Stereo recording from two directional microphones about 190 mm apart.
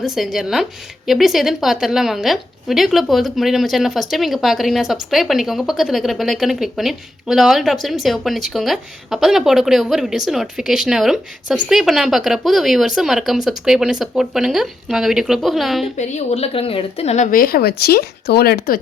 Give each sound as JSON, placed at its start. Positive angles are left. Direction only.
{"t": 0.0, "sound": "a woman's voice", "side_deg": 0}
{"t": 16.0, "sound": "a woman's voice", "side_deg": 35}
{"t": 17.3, "sound": "speech", "side_deg": 50}